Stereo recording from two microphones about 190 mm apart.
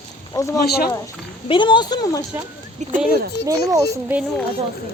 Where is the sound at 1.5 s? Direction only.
25° left (ahead or behind).